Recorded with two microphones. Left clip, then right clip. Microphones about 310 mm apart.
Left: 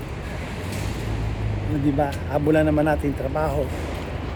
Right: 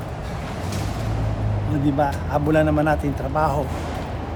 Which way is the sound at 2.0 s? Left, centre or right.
Centre.